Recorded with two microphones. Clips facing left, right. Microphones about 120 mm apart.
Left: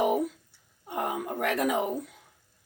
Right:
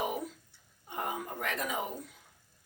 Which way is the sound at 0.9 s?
70° left (ahead or behind).